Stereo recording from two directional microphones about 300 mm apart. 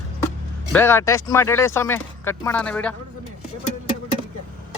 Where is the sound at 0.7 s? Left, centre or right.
Centre.